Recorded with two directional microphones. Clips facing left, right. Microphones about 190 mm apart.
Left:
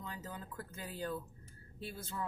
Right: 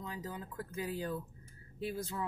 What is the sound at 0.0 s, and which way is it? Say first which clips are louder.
Speech: right 3 dB; 10° right (ahead or behind).